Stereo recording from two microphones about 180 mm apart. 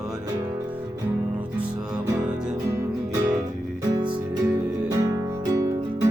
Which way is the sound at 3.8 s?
25° right (ahead or behind).